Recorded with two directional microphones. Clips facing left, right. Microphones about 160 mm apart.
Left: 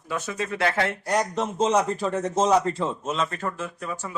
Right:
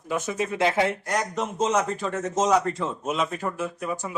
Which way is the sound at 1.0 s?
35° left (ahead or behind).